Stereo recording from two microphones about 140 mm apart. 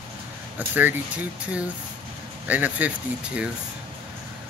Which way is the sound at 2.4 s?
10° right (ahead or behind).